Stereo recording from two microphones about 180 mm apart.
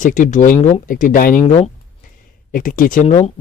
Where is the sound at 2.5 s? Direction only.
50° left (ahead or behind).